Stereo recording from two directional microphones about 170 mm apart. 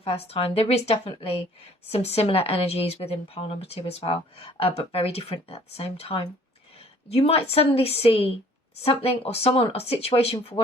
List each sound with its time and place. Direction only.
0.0 s a woman's voice: 35° left (ahead or behind)